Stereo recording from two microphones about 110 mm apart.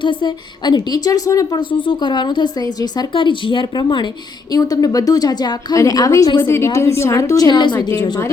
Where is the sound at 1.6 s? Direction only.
50° left (ahead or behind).